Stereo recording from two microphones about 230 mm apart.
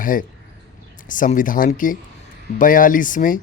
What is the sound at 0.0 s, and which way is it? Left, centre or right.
Speech, left.